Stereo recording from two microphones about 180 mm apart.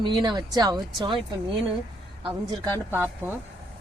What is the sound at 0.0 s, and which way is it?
Speech, 25° right (ahead or behind).